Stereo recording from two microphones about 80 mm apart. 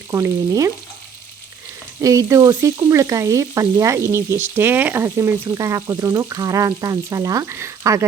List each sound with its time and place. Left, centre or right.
0.1 s frying: right
2.0 s frying: right
5.0 s frying: right
7.4 s frying: right